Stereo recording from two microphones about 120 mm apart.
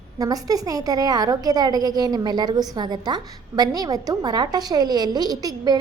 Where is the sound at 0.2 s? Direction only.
30° right (ahead or behind).